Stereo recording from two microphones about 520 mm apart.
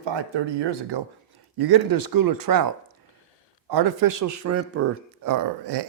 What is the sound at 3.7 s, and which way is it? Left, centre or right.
Speech, right.